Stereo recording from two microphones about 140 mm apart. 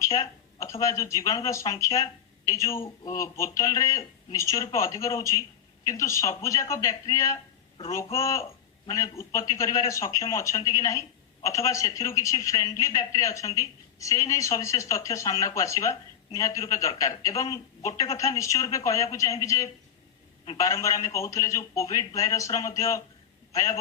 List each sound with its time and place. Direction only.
0.2 s a man's voice: 20° left (ahead or behind)